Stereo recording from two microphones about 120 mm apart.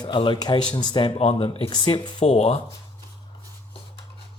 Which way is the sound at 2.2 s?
60° left (ahead or behind).